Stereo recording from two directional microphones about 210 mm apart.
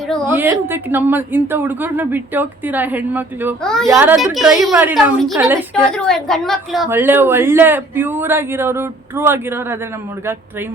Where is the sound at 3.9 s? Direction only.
10° right (ahead or behind).